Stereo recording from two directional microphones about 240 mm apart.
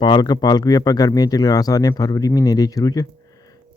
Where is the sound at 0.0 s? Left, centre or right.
Centre.